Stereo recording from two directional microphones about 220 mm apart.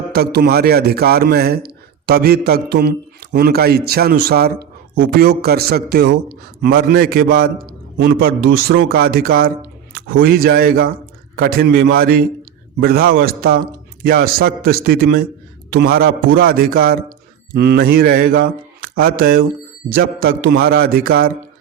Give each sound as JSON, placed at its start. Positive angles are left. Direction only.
{"t": 0.1, "sound": "a man's voice", "side_deg": -45}